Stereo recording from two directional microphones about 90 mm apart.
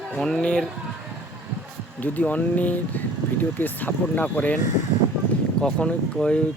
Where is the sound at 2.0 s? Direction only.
20° left (ahead or behind).